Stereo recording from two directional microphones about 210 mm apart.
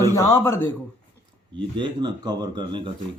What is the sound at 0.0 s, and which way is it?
Speech, 15° left (ahead or behind).